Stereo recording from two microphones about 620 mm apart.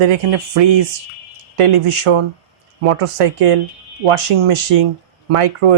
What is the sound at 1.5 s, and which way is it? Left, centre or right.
Speech, right.